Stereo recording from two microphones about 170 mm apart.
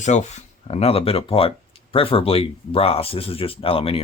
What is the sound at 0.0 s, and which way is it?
Speech, 40° left (ahead or behind).